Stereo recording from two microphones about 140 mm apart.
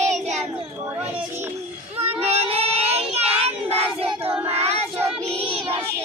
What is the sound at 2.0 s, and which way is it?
Child singing, 50° right (ahead or behind).